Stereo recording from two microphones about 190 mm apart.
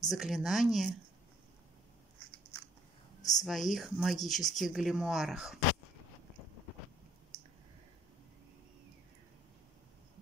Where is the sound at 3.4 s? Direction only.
Centre (ahead or behind).